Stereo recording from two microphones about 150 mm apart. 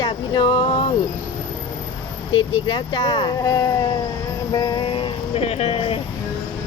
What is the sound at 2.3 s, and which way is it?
A woman's voice, 30° left (ahead or behind).